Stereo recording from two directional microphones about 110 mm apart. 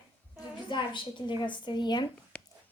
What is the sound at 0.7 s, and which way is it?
A woman's voice, 45° left (ahead or behind).